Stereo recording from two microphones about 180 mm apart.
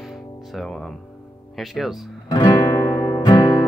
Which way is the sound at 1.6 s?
Centre (ahead or behind).